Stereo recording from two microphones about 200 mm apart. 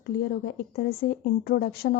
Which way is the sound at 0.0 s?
50° left (ahead or behind).